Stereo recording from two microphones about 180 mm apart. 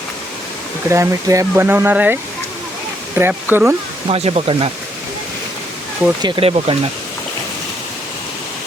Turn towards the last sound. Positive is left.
turn(degrees=-25)  # may be behind; listen again after turning